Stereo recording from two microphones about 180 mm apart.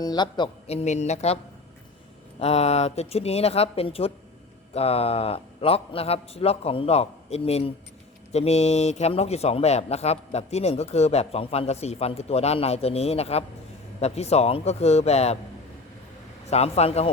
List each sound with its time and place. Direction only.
0.0 s a man's voice: 25° left (ahead or behind)
2.4 s a man's voice: 35° left (ahead or behind)
16.5 s a man's voice: 35° left (ahead or behind)